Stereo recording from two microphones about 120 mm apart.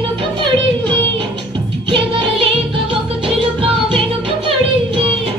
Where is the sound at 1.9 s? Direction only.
45° right (ahead or behind).